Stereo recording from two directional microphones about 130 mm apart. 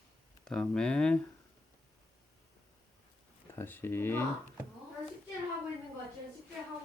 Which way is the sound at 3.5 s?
20° left (ahead or behind).